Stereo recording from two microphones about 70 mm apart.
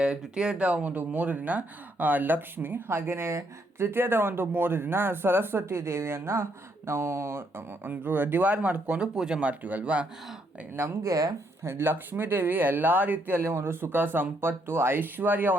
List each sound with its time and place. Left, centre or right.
0.0 s speech: centre
11.0 s speech: right
11.6 s speech: right